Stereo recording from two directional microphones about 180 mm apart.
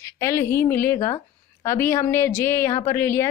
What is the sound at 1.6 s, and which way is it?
A woman's voice, 15° left (ahead or behind).